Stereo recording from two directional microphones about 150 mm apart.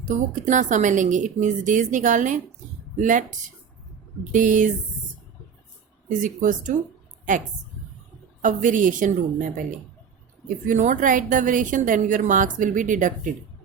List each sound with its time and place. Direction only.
0.0 s a woman's voice: 55° right (ahead or behind)
6.1 s a woman's voice: 60° right (ahead or behind)
8.4 s a woman's voice: 60° right (ahead or behind)